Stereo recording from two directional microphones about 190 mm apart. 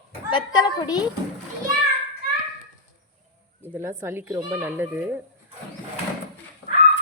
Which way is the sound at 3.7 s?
15° right (ahead or behind).